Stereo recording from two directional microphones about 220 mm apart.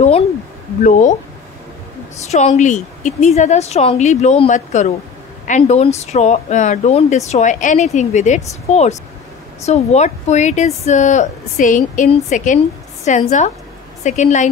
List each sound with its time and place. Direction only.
0.8 s speech: 35° left (ahead or behind)
2.3 s speech: 30° left (ahead or behind)